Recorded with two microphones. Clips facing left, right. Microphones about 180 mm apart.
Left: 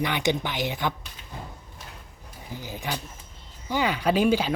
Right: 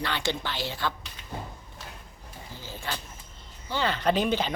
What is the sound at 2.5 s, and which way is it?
Speech, 15° left (ahead or behind).